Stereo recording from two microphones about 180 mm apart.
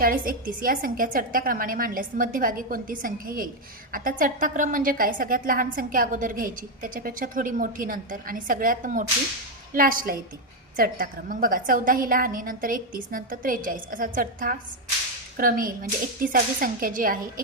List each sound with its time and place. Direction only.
0.0 s a woman's voice: 50° right (ahead or behind)